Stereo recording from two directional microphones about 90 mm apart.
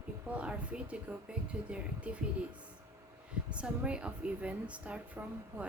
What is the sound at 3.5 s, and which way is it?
A woman's voice, 10° right (ahead or behind).